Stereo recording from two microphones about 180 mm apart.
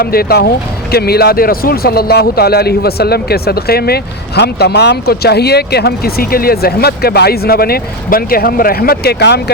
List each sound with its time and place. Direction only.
0.0 s speech: 55° left (ahead or behind)